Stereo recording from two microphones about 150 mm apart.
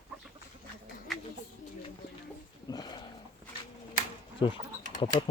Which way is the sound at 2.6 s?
25° left (ahead or behind).